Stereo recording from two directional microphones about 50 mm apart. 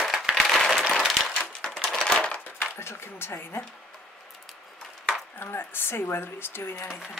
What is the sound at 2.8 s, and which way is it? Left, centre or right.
Speech, left.